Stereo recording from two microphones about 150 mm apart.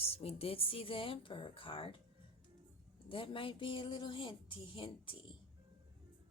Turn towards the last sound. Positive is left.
turn(degrees=35)  # may be behind; listen again after turning